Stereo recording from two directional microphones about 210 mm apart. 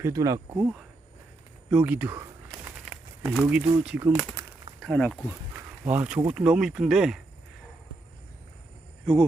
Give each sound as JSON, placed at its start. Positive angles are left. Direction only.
{"t": 0.0, "sound": "speech", "side_deg": -15}
{"t": 1.7, "sound": "speech", "side_deg": -10}
{"t": 2.5, "sound": "crumpling", "side_deg": 0}
{"t": 3.5, "sound": "speech", "side_deg": -10}
{"t": 4.8, "sound": "speech", "side_deg": 5}
{"t": 5.8, "sound": "speech", "side_deg": -10}